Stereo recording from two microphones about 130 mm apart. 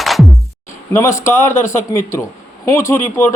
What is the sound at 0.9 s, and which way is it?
A man's voice, 20° left (ahead or behind).